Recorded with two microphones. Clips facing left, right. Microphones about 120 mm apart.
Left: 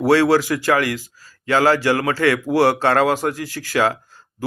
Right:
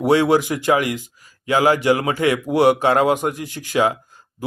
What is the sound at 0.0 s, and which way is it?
Speech, 20° right (ahead or behind).